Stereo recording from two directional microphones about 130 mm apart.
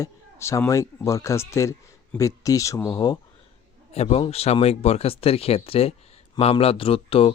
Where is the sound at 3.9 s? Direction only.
55° left (ahead or behind).